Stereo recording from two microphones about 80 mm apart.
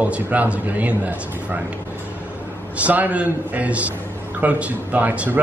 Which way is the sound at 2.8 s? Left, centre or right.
Centre.